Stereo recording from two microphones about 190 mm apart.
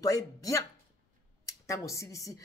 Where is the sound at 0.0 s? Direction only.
15° left (ahead or behind).